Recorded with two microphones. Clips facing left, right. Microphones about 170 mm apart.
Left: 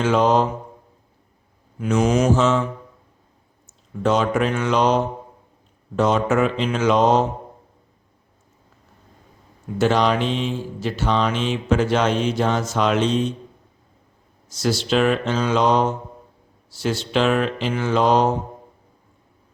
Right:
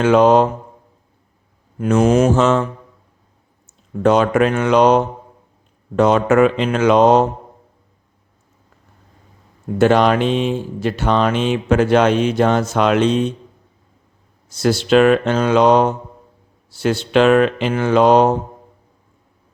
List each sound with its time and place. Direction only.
0.0 s speech: 60° right (ahead or behind)
1.8 s mantra: 50° right (ahead or behind)
4.0 s speech: 60° right (ahead or behind)
9.7 s speech: 55° right (ahead or behind)
14.5 s speech: 60° right (ahead or behind)